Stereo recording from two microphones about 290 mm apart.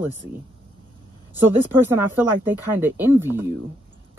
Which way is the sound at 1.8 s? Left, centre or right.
Centre.